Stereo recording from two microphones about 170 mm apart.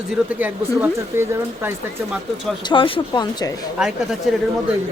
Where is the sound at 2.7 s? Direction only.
30° left (ahead or behind).